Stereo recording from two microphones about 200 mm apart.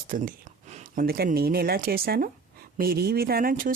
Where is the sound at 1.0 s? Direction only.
50° right (ahead or behind).